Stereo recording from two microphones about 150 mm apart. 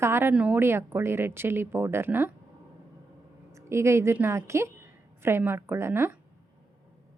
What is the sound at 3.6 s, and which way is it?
A woman's voice, 20° right (ahead or behind).